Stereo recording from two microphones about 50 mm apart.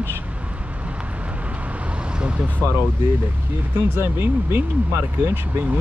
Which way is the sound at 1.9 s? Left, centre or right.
Right.